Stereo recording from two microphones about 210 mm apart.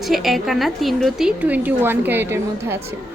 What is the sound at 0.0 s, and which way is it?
A woman's voice, centre (ahead or behind).